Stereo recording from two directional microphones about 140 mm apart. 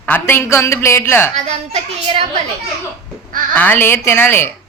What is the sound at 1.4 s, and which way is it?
Speech, 45° right (ahead or behind).